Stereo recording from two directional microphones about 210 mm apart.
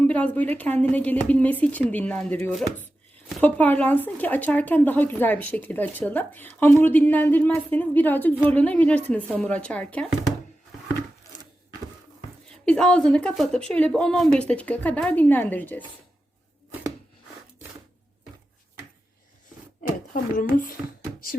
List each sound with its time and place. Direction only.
0.1 s speech: 5° left (ahead or behind)
12.6 s speech: 5° left (ahead or behind)
20.1 s a child's voice: 40° left (ahead or behind)